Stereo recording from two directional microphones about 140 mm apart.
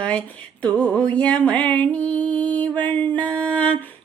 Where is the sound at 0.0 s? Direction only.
10° left (ahead or behind).